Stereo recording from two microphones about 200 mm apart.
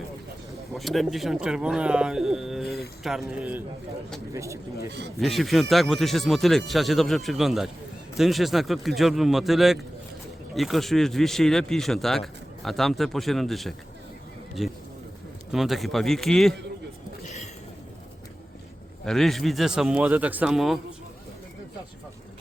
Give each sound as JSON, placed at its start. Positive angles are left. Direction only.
{"t": 0.7, "sound": "speech", "side_deg": 0}
{"t": 4.9, "sound": "speech", "side_deg": -55}
{"t": 5.1, "sound": "speech", "side_deg": 0}
{"t": 17.2, "sound": "a sound", "side_deg": 35}
{"t": 19.0, "sound": "speech", "side_deg": 0}